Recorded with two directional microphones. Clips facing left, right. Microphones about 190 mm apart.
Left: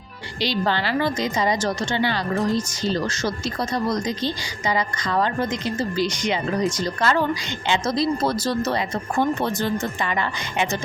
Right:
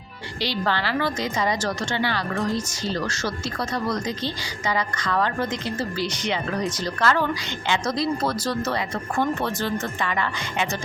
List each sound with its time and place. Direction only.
0.3 s speech: 15° left (ahead or behind)